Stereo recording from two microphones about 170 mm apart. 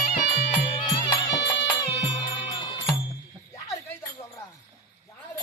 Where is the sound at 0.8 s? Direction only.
25° left (ahead or behind).